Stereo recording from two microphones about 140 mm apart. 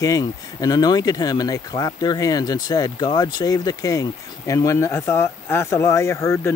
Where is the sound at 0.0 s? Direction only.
25° left (ahead or behind).